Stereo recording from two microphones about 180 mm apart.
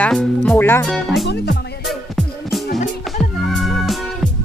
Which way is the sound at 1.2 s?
70° left (ahead or behind).